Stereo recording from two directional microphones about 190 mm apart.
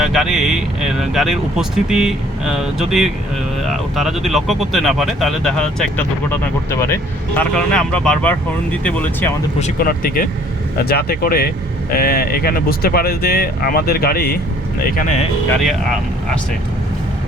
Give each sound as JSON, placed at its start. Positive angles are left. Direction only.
{"t": 0.0, "sound": "speech", "side_deg": 0}
{"t": 9.6, "sound": "speech", "side_deg": 45}
{"t": 15.6, "sound": "speech", "side_deg": 0}